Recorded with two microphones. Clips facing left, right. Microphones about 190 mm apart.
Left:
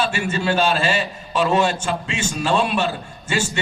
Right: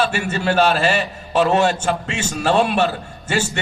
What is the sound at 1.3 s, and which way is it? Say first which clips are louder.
A man's voice: right 3 dB; 65° right (ahead or behind).